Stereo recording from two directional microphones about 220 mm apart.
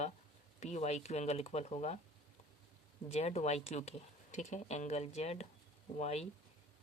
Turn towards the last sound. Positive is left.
turn(degrees=30)  # may be behind; listen again after turning